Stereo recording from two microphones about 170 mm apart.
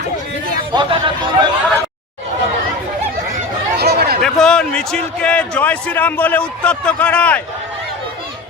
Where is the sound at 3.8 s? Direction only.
70° right (ahead or behind).